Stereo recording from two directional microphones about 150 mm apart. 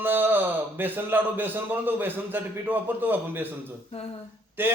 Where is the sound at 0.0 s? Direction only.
15° right (ahead or behind).